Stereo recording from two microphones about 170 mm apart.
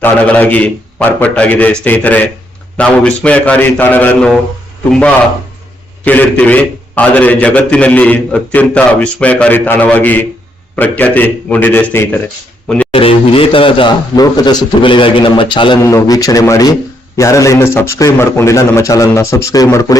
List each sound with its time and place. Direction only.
0.0 s a man's voice: 10° left (ahead or behind)
12.6 s a sound: 5° left (ahead or behind)
12.9 s speech: 35° left (ahead or behind)
15.8 s a man's voice: 15° left (ahead or behind)